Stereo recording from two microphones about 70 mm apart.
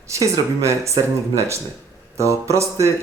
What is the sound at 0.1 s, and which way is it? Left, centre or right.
Speech, right.